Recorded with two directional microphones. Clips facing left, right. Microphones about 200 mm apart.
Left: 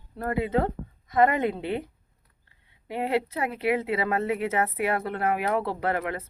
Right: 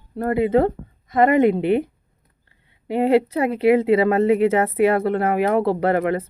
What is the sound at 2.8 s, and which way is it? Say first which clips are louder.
Speech: right 10 dB; 30° right (ahead or behind).